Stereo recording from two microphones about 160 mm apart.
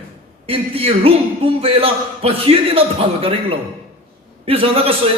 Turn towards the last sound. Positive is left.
turn(degrees=-35)  # may be behind; listen again after turning